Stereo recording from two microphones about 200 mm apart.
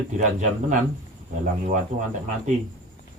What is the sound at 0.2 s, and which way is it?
Speech, 40° right (ahead or behind).